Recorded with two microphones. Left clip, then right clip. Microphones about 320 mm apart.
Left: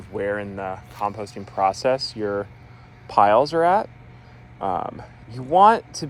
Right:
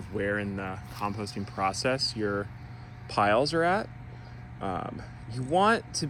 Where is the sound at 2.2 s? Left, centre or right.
Left.